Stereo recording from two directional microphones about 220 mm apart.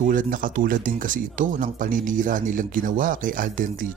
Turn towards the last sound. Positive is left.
turn(degrees=-40)  # may be behind; listen again after turning